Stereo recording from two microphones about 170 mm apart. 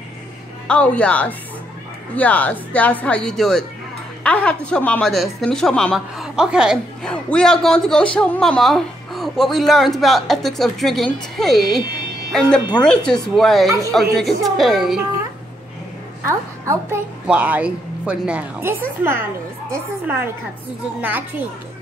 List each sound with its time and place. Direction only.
0.7 s a woman's voice: 5° left (ahead or behind)
16.6 s a woman's voice: 10° right (ahead or behind)